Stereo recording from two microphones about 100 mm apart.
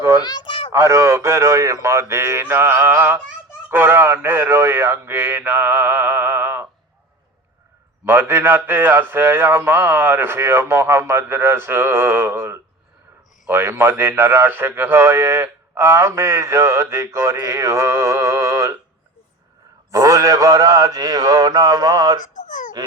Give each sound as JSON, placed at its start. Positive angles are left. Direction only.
{"t": 0.2, "sound": "a child's voice", "side_deg": 45}
{"t": 0.7, "sound": "a man's voice", "side_deg": -25}
{"t": 8.0, "sound": "a man's voice", "side_deg": -25}
{"t": 19.9, "sound": "a man's voice", "side_deg": -35}